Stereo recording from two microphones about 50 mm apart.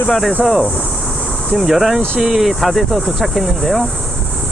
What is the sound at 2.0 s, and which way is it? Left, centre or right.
Speech, right.